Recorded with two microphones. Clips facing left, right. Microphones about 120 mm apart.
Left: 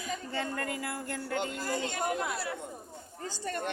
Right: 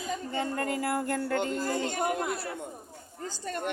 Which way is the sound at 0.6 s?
40° right (ahead or behind).